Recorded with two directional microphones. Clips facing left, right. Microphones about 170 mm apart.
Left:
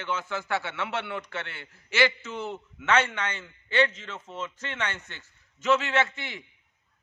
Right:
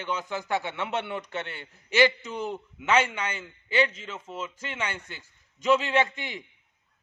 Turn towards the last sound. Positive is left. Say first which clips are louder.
# right 2 dB
turn(degrees=-15)  # may be behind; listen again after turning